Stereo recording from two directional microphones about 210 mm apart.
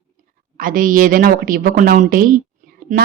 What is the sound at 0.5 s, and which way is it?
A man's voice, 40° right (ahead or behind).